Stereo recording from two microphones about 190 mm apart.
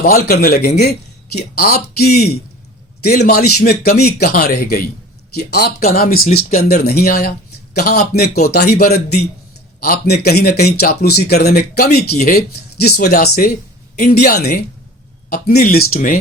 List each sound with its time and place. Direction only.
0.3 s a man's voice: 55° left (ahead or behind)